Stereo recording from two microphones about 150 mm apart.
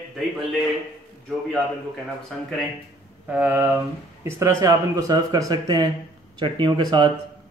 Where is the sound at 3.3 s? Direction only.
10° right (ahead or behind).